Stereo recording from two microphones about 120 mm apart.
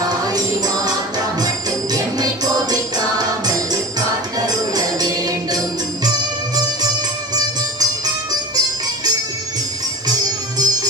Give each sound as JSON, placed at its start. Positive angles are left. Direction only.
{"t": 0.3, "sound": "music", "side_deg": -30}
{"t": 7.8, "sound": "music", "side_deg": -35}